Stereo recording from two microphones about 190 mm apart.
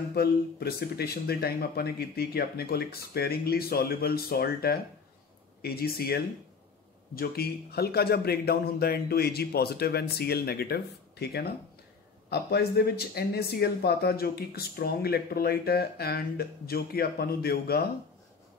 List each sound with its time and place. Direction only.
0.1 s speech: 55° left (ahead or behind)